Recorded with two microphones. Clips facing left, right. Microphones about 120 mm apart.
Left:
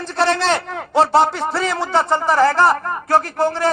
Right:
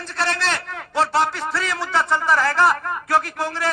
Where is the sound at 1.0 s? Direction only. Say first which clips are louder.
Left 5 dB; 20° left (ahead or behind).